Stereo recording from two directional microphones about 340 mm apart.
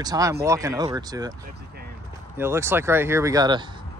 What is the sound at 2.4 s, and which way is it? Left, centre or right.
Speech, centre.